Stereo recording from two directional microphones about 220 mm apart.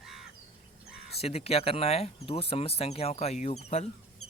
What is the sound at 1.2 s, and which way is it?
Speech, 25° left (ahead or behind).